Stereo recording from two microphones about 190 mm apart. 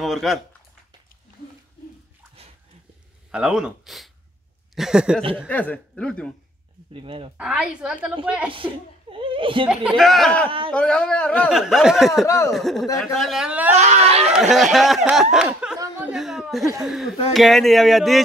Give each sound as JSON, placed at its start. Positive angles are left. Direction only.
{"t": 0.0, "sound": "speech", "side_deg": 0}
{"t": 3.3, "sound": "speech", "side_deg": -5}
{"t": 5.5, "sound": "speech", "side_deg": 10}
{"t": 6.9, "sound": "speech", "side_deg": -30}
{"t": 7.3, "sound": "speech", "side_deg": -5}
{"t": 8.5, "sound": "speech", "side_deg": -25}
{"t": 9.7, "sound": "speech", "side_deg": 0}
{"t": 12.3, "sound": "speech", "side_deg": 15}
{"t": 12.5, "sound": "speech", "side_deg": 0}
{"t": 13.7, "sound": "speech", "side_deg": -35}
{"t": 14.5, "sound": "speech", "side_deg": 0}
{"t": 15.4, "sound": "a sound", "side_deg": -5}
{"t": 15.8, "sound": "chuckle", "side_deg": -5}
{"t": 17.3, "sound": "speech", "side_deg": 0}